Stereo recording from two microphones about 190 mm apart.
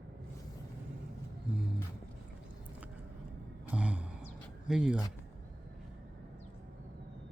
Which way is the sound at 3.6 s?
5° right (ahead or behind).